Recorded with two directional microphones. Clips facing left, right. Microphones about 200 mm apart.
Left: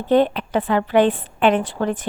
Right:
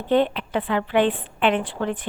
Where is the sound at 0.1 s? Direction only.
40° left (ahead or behind).